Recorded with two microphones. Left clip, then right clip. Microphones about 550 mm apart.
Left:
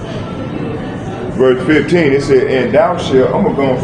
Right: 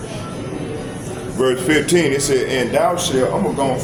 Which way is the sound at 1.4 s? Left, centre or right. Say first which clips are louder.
Left 6 dB; right.